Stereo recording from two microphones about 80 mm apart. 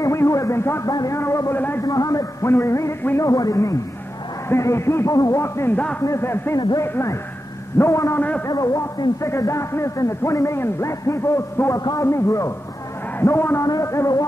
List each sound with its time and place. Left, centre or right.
0.0 s music: left
0.8 s a man's voice: left
1.2 s a man's voice: left
1.8 s a man's voice: left
5.4 s a man's voice: left
8.5 s a man's voice: left
13.7 s a man's voice: left